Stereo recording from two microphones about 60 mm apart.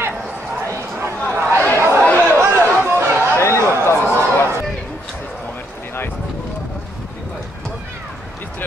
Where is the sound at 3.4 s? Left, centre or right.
Left.